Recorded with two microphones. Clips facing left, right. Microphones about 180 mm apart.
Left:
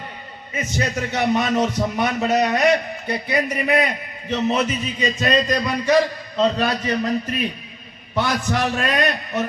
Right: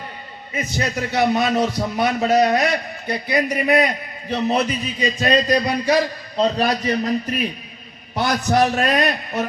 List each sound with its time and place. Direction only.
0.5 s a man's voice: 35° right (ahead or behind)
8.2 s a man's voice: 40° right (ahead or behind)